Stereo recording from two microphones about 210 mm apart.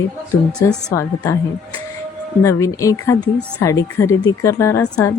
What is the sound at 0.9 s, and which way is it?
Speech, 15° left (ahead or behind).